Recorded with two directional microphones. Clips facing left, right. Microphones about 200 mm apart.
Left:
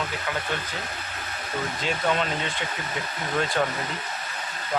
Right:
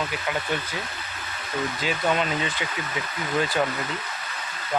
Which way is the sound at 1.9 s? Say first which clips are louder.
Even; 5° right (ahead or behind).